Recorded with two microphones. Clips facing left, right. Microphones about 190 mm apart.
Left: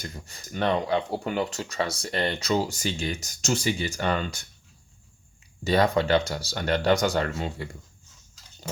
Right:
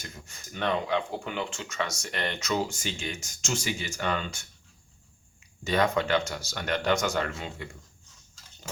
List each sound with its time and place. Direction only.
0.3 s speech: 35° left (ahead or behind)
5.6 s speech: 35° left (ahead or behind)